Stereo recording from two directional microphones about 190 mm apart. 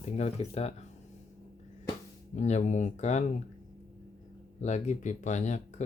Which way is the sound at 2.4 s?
40° left (ahead or behind).